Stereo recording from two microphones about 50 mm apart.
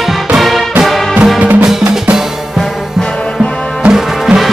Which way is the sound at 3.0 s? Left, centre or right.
Left.